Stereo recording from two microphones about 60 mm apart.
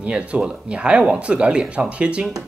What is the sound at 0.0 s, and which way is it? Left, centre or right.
Speech, right.